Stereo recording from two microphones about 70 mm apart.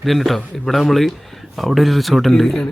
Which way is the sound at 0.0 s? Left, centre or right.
Centre.